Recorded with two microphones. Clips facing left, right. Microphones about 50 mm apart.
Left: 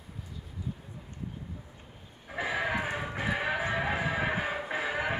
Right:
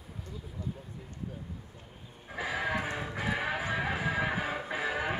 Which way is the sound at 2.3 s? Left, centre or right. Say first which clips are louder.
Left 2 dB; centre.